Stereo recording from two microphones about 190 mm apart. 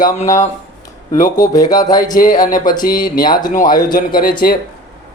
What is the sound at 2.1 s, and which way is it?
Speech, 45° left (ahead or behind).